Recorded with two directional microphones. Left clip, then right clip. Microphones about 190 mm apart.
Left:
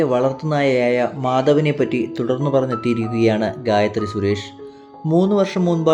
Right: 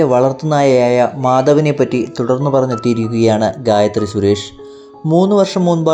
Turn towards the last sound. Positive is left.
turn(degrees=-15)  # may be behind; listen again after turning